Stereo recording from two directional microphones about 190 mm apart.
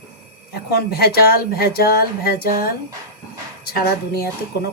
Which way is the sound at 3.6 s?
55° left (ahead or behind).